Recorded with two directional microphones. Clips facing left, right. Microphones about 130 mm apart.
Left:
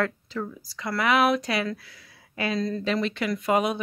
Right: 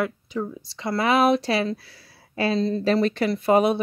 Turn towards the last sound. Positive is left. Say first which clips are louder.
# right 5 dB
turn(degrees=-30)  # may be behind; listen again after turning